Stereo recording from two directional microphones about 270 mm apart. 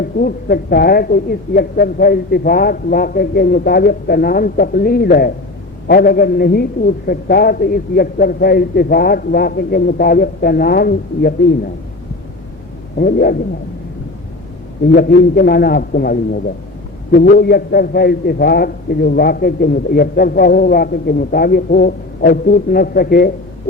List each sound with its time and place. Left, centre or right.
0.2 s a man's voice: left
13.0 s a man's voice: left
14.9 s a man's voice: left